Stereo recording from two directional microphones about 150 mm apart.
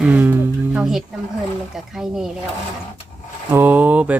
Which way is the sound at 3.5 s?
10° right (ahead or behind).